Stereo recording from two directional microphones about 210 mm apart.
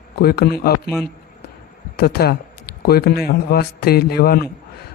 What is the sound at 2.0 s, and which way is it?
Speech, 50° left (ahead or behind).